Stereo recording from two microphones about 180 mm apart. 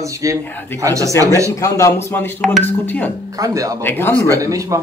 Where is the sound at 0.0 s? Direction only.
15° right (ahead or behind).